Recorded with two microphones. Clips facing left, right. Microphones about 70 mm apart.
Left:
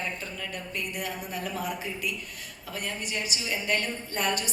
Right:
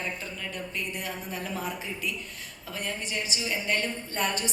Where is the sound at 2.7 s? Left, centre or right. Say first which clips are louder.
Even; right.